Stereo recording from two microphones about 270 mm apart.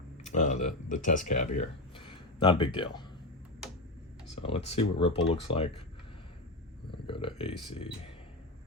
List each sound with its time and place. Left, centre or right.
0.3 s speech: left
4.4 s speech: left
7.1 s speech: centre